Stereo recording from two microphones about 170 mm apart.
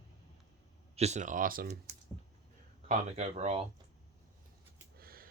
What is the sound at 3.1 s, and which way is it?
Speech, 40° right (ahead or behind).